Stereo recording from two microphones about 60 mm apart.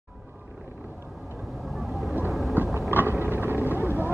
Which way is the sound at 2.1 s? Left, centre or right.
Right.